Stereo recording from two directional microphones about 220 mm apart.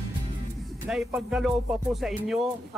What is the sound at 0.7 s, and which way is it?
Speech, centre (ahead or behind).